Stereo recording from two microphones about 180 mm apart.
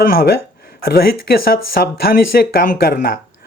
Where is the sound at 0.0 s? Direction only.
55° left (ahead or behind).